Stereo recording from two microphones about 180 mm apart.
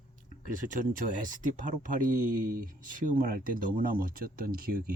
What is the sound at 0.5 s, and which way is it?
Speech, 50° right (ahead or behind).